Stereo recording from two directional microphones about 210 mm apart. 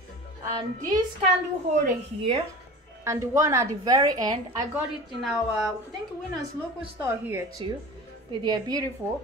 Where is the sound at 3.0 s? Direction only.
15° right (ahead or behind).